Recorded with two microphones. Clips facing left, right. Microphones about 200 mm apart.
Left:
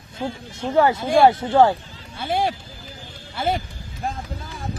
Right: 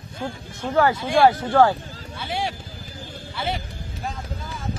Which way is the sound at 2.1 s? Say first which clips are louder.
Left 5 dB; 50° left (ahead or behind).